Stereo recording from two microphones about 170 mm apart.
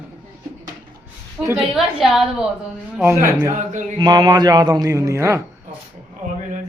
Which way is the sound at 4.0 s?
25° right (ahead or behind).